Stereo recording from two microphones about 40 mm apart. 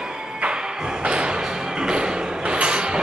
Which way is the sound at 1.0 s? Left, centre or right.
Right.